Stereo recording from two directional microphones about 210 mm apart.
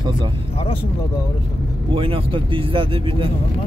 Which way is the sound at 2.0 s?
25° right (ahead or behind).